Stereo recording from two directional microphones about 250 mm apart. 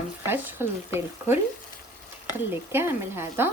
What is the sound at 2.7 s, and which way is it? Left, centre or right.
Speech, centre.